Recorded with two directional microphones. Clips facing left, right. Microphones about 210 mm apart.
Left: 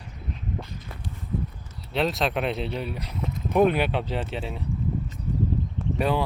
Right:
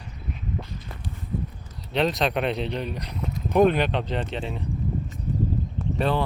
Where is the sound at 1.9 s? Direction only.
Centre (ahead or behind).